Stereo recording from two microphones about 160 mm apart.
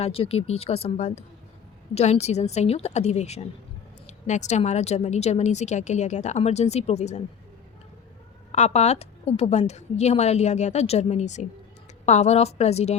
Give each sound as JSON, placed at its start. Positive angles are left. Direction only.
{"t": 0.0, "sound": "a woman's voice", "side_deg": 35}
{"t": 8.5, "sound": "a woman's voice", "side_deg": 45}